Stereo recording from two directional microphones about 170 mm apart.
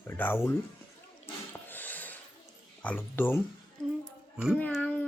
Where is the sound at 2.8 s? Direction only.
10° left (ahead or behind).